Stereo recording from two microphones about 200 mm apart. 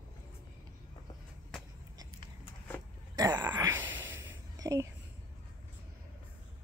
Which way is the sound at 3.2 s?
20° right (ahead or behind).